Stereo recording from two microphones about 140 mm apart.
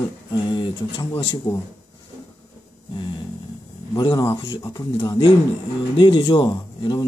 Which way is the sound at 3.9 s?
30° left (ahead or behind).